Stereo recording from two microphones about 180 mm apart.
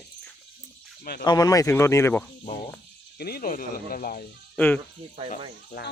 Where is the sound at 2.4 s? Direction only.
45° left (ahead or behind).